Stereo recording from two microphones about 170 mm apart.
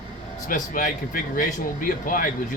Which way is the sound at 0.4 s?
55° left (ahead or behind).